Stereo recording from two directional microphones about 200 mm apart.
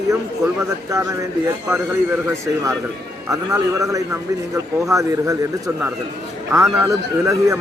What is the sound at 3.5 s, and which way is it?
Speech, 15° right (ahead or behind).